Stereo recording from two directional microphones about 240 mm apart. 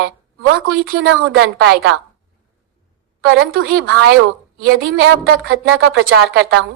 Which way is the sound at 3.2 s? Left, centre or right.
Right.